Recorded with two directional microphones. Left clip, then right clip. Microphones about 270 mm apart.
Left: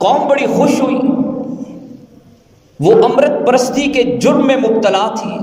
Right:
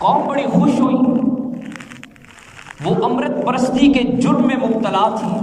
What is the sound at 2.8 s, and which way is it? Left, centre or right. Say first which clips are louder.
A man's voice: left 9 dB; left.